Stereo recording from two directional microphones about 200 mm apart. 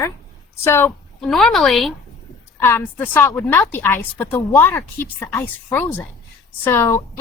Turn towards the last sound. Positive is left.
turn(degrees=10)  # may be behind; listen again after turning